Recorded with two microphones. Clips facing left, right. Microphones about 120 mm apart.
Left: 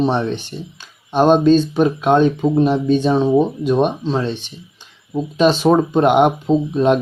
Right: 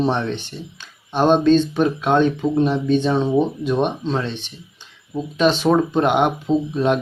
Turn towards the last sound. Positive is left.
turn(degrees=20)  # may be behind; listen again after turning